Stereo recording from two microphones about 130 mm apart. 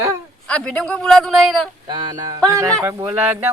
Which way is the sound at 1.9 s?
35° right (ahead or behind).